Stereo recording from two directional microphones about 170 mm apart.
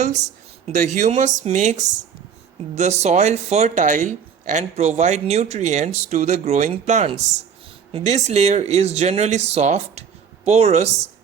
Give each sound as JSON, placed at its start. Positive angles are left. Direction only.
{"t": 0.0, "sound": "a woman's voice", "side_deg": -45}